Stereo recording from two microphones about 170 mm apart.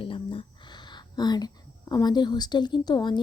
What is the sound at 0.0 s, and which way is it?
Speech, 30° left (ahead or behind).